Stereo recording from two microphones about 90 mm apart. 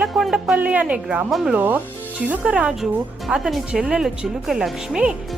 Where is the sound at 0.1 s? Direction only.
5° right (ahead or behind).